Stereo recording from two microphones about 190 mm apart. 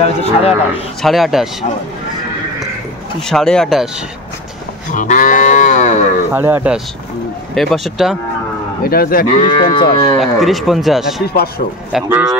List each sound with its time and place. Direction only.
0.0 s speech: 30° left (ahead or behind)
1.0 s a man's voice: centre (ahead or behind)
3.2 s a man's voice: 5° left (ahead or behind)
4.9 s cattle: 40° left (ahead or behind)
6.3 s a man's voice: 10° right (ahead or behind)
8.8 s cattle: 50° left (ahead or behind)
9.5 s speech: 25° left (ahead or behind)
10.1 s a man's voice: centre (ahead or behind)
11.2 s cattle: 55° left (ahead or behind)
11.9 s speech: 10° right (ahead or behind)